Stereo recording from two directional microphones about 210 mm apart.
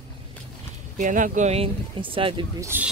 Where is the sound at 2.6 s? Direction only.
10° right (ahead or behind).